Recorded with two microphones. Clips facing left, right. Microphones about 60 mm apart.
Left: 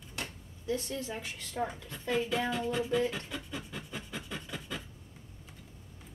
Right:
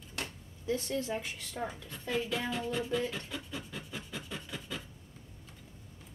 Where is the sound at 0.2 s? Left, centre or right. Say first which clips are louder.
Even; left.